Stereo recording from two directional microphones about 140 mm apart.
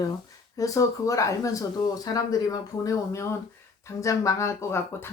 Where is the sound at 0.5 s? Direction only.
25° left (ahead or behind).